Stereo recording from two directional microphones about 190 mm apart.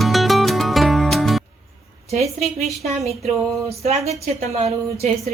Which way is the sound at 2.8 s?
35° right (ahead or behind).